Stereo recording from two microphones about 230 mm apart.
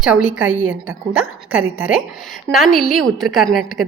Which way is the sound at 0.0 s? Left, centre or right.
Centre.